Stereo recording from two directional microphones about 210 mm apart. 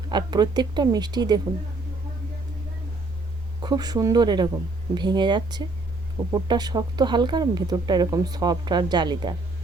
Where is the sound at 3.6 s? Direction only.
20° right (ahead or behind).